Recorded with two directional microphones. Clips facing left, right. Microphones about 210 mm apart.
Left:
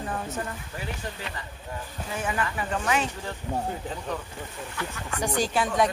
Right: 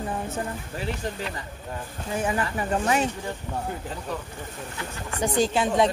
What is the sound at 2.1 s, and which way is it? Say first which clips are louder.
Speech: right 3 dB; 30° right (ahead or behind).